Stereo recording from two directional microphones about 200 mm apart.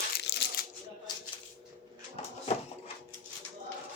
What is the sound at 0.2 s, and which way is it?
Shuffling cards, 55° left (ahead or behind).